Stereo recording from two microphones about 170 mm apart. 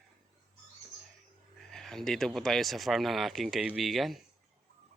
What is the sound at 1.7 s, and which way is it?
Speech, 5° left (ahead or behind).